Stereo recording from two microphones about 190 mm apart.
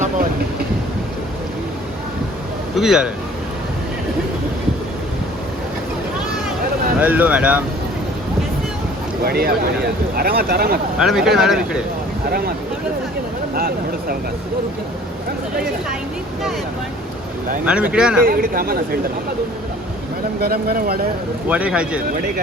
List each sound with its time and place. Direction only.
2.7 s speech: centre (ahead or behind)
7.0 s speech: 10° right (ahead or behind)
9.2 s speech: 55° right (ahead or behind)
10.9 s speech: centre (ahead or behind)
13.6 s speech: 50° right (ahead or behind)
17.7 s speech: 5° right (ahead or behind)
18.3 s speech: 50° right (ahead or behind)
20.4 s speech: 55° right (ahead or behind)
21.4 s speech: 5° right (ahead or behind)